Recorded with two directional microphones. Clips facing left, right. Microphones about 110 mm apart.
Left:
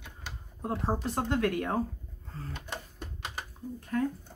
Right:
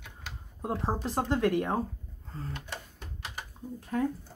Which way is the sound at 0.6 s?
5° right (ahead or behind).